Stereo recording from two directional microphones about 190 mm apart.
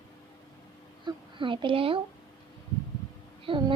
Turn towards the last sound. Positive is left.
turn(degrees=-25)  # may be behind; listen again after turning